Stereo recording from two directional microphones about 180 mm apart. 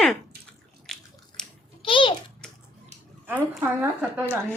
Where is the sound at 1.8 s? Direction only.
30° left (ahead or behind).